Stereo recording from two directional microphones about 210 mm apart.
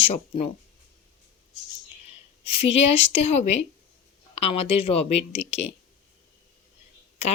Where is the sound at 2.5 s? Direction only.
25° left (ahead or behind).